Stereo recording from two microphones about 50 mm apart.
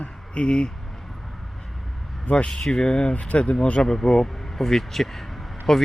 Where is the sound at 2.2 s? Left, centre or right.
Left.